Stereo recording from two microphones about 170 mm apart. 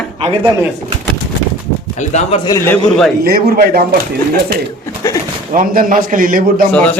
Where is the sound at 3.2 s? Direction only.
60° right (ahead or behind).